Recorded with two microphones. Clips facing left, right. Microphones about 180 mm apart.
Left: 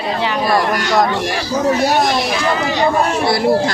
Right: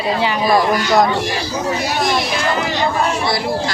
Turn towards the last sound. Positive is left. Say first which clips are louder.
# left 5 dB
turn(degrees=55)  # may be behind; listen again after turning